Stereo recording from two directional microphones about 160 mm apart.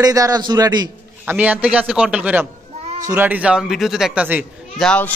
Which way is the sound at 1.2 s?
10° right (ahead or behind).